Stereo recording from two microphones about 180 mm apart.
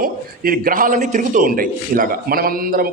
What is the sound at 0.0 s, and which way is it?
A man's voice, 55° right (ahead or behind).